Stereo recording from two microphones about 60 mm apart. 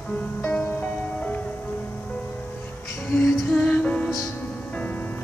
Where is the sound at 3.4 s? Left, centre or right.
Left.